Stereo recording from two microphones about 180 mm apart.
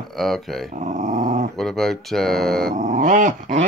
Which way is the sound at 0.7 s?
40° right (ahead or behind).